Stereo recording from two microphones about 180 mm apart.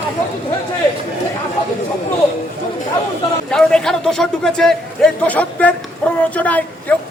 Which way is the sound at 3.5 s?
5° left (ahead or behind).